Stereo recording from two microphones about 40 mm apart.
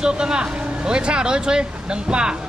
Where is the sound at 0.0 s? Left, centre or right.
Right.